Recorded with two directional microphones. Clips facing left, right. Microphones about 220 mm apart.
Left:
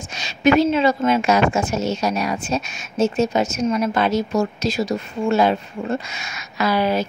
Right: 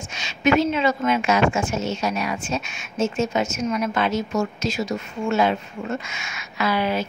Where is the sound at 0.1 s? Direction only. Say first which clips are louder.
Left 3 dB; 35° left (ahead or behind).